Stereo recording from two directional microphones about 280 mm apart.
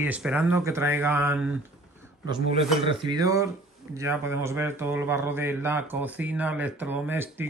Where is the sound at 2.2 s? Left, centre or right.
Centre.